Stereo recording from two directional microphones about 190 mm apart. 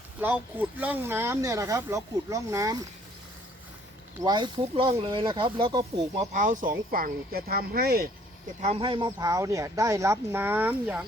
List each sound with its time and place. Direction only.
0.2 s speech: 10° right (ahead or behind)
4.2 s speech: 20° right (ahead or behind)
6.3 s speech: 40° right (ahead or behind)
8.6 s speech: 30° right (ahead or behind); by 11.0 s 10° right (ahead or behind)